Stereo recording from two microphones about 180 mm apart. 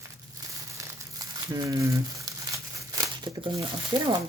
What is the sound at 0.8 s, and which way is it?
Crumpling, 20° right (ahead or behind).